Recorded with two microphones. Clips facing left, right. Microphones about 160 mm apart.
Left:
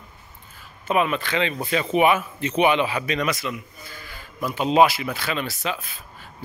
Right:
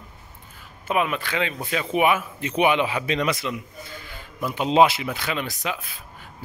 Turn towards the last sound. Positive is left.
turn(degrees=-15)  # may be behind; listen again after turning